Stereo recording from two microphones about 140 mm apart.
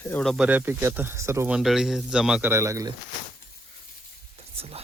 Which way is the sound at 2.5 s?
20° right (ahead or behind).